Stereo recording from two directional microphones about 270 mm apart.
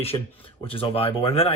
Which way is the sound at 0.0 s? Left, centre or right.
Left.